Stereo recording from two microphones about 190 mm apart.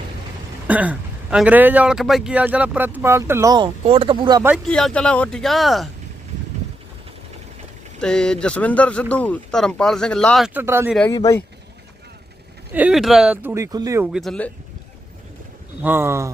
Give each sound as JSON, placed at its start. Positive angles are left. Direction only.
{"t": 0.7, "sound": "speech", "side_deg": -5}
{"t": 4.4, "sound": "speech", "side_deg": 0}
{"t": 8.0, "sound": "speech", "side_deg": 5}
{"t": 11.1, "sound": "speech", "side_deg": 20}
{"t": 12.7, "sound": "speech", "side_deg": -5}
{"t": 14.1, "sound": "speech", "side_deg": 0}
{"t": 15.8, "sound": "speech", "side_deg": -10}